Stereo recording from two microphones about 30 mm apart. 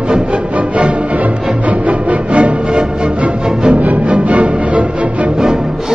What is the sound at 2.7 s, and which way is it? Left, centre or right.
Music, right.